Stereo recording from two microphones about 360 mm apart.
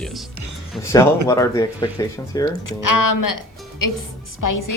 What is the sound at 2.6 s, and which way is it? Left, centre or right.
A woman's voice, left.